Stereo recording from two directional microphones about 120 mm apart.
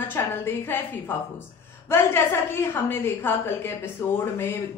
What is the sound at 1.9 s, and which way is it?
A woman's voice, 20° left (ahead or behind).